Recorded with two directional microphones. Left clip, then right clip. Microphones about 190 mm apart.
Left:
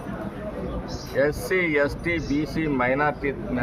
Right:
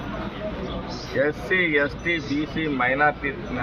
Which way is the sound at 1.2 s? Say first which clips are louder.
Right 1 dB; 45° left (ahead or behind).